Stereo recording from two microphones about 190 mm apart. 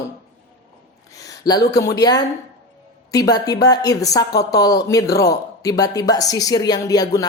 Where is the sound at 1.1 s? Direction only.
20° left (ahead or behind).